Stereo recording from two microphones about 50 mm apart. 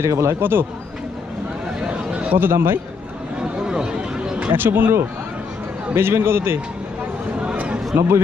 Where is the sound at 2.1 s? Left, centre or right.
Right.